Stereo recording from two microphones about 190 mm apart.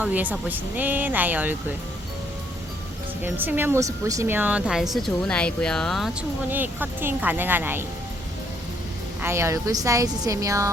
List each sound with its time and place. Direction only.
0.0 s a woman's voice: 10° right (ahead or behind)
3.2 s a woman's voice: 10° right (ahead or behind)
9.2 s a woman's voice: 15° right (ahead or behind)